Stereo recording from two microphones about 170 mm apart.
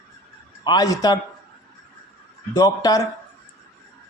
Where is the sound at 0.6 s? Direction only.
25° left (ahead or behind).